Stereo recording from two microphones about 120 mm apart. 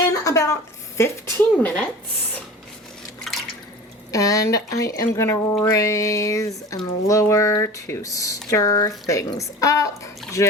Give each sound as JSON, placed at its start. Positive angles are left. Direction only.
{"t": 0.3, "sound": "a sound", "side_deg": 30}
{"t": 1.0, "sound": "speech", "side_deg": 25}
{"t": 1.6, "sound": "speech", "side_deg": 10}
{"t": 3.2, "sound": "drip", "side_deg": 0}
{"t": 4.1, "sound": "speech", "side_deg": 25}